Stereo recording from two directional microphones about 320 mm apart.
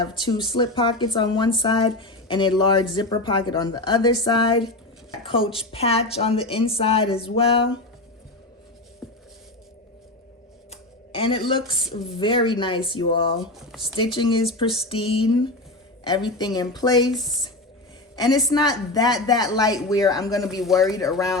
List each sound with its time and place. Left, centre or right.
0.0 s speech: centre
9.0 s a sound: centre
10.7 s a sound: centre
12.2 s speech: centre
13.4 s speech: centre
13.8 s speech: centre
17.2 s speech: centre
18.2 s speech: centre